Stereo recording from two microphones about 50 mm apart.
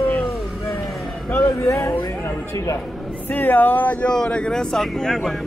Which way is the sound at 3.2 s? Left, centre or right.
Left.